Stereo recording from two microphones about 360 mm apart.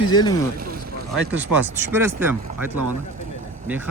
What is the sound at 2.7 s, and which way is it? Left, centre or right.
Speech, right.